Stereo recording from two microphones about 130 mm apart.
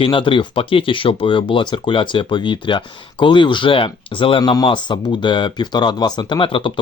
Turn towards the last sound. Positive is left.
turn(degrees=40)  # may be behind; listen again after turning